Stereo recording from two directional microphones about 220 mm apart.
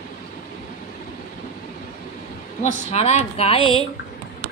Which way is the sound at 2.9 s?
30° left (ahead or behind).